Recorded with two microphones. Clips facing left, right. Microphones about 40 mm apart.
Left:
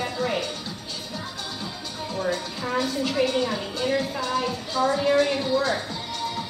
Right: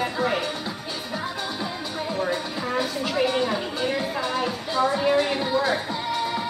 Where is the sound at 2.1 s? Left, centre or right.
Centre.